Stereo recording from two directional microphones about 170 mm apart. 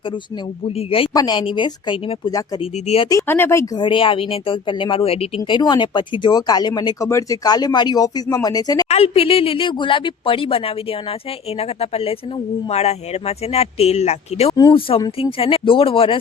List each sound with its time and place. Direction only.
0.8 s speech: 35° left (ahead or behind)
3.1 s speech: 15° left (ahead or behind)
3.8 s speech: 30° left (ahead or behind)
8.9 s speech: 35° left (ahead or behind)
11.8 s speech: 35° left (ahead or behind)
14.5 s speech: 25° left (ahead or behind)